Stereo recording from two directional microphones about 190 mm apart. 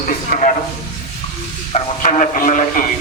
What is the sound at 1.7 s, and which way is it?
Speech, 40° left (ahead or behind).